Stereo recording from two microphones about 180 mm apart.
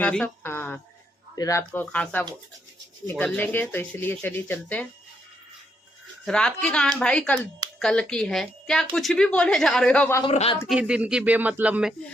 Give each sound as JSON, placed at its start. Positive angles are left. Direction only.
{"t": 0.0, "sound": "speech", "side_deg": 10}
{"t": 6.2, "sound": "a woman's voice", "side_deg": 5}
{"t": 10.2, "sound": "speech", "side_deg": 30}
{"t": 10.7, "sound": "speech", "side_deg": -5}